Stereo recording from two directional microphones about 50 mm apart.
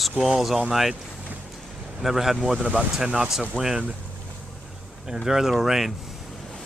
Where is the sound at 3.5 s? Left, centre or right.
Left.